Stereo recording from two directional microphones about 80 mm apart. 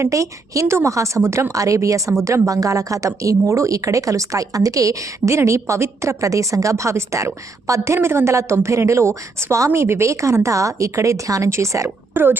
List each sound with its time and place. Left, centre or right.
0.0 s a woman's voice: right
12.1 s speech: right